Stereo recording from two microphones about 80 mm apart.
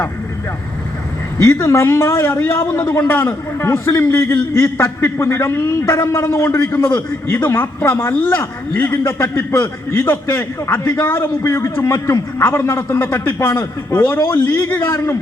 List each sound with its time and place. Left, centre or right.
1.5 s a man's voice: left